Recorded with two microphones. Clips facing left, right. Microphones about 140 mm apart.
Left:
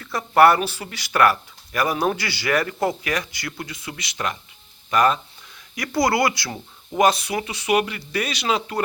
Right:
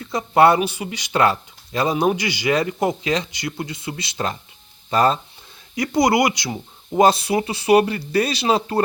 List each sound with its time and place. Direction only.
0.0 s speech: 20° right (ahead or behind)